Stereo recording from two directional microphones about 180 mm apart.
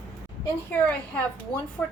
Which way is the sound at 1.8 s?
5° left (ahead or behind).